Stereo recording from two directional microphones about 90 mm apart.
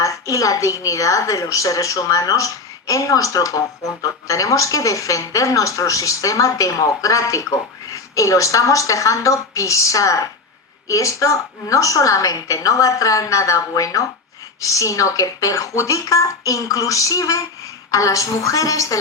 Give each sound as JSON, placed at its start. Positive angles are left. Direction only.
{"t": 0.0, "sound": "a woman's voice", "side_deg": 40}